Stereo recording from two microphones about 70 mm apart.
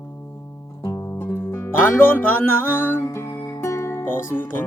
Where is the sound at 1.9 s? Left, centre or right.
Left.